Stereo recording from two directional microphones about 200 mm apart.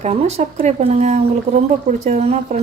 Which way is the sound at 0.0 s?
35° right (ahead or behind).